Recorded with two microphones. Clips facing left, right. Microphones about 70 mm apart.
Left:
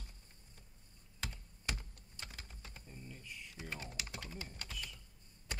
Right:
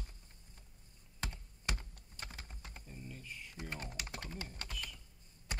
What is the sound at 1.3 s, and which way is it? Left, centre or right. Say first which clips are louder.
Computer keyboard: right 1 dB; right.